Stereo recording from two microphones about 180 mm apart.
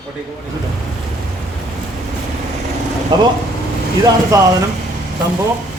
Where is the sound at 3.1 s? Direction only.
25° right (ahead or behind).